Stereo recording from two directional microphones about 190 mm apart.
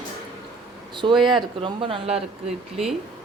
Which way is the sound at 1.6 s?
25° right (ahead or behind).